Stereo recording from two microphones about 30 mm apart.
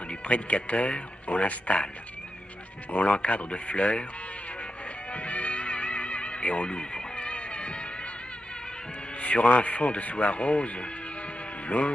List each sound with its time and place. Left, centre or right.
0.1 s speech: left
3.0 s speech: left
5.1 s music: left
9.2 s a man's voice: left